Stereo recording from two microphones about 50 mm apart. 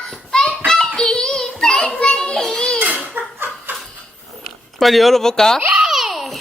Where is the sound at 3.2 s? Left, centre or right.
Right.